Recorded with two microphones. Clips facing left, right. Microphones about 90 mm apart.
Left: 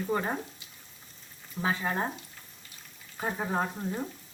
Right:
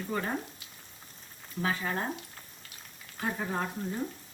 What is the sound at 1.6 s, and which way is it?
Speech, 20° left (ahead or behind).